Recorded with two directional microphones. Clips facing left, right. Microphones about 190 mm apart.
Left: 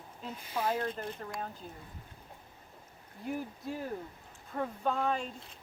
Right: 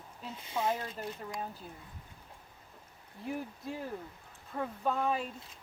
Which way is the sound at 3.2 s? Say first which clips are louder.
Left 1 dB; centre (ahead or behind).